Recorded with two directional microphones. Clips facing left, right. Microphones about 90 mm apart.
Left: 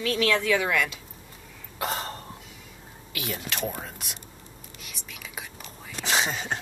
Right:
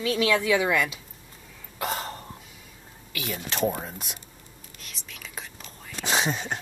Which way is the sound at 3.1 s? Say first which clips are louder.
Even; centre (ahead or behind).